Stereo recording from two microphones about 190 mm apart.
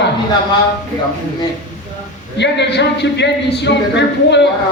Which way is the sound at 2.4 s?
65° left (ahead or behind).